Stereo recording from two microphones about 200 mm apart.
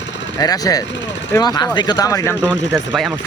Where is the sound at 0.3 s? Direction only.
20° left (ahead or behind).